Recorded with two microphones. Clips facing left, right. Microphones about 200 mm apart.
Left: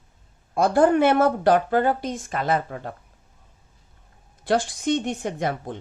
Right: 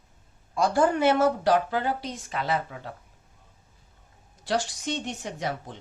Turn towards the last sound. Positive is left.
turn(degrees=55)  # may be behind; listen again after turning